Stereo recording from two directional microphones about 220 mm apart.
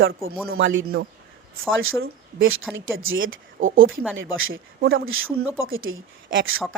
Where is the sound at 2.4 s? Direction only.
65° right (ahead or behind).